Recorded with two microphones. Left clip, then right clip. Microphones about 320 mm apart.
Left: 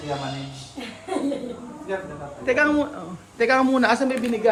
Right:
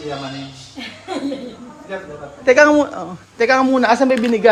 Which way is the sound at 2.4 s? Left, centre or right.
Centre.